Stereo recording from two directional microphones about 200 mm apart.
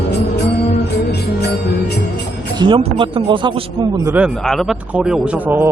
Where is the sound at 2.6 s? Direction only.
25° right (ahead or behind).